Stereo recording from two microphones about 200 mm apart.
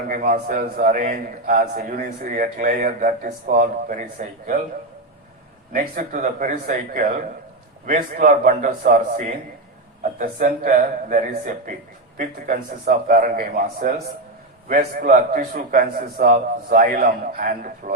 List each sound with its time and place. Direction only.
0.1 s a man's voice: 45° right (ahead or behind)
5.7 s a man's voice: 45° right (ahead or behind)